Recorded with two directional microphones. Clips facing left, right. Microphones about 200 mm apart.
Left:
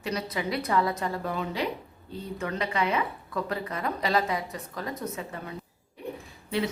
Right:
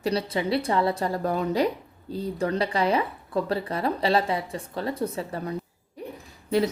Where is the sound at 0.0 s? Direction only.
30° right (ahead or behind).